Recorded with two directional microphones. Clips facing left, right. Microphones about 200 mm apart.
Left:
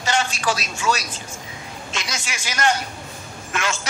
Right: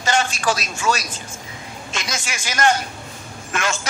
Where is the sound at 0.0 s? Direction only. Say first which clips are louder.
Right 2 dB; 50° right (ahead or behind).